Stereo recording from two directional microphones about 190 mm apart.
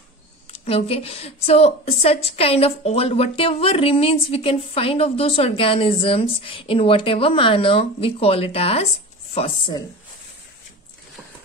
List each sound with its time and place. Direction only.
0.5 s speech: 30° left (ahead or behind)